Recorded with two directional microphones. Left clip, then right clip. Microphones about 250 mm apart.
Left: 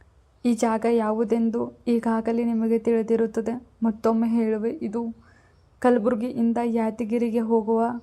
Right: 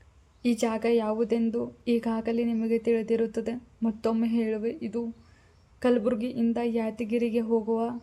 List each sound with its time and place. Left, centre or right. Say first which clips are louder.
0.4 s a woman's voice: left 4 dB; centre